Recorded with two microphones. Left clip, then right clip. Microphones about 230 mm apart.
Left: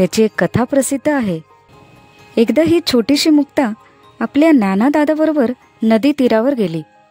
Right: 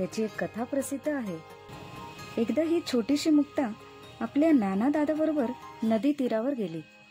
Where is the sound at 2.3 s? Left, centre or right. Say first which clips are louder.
Left 15 dB; left.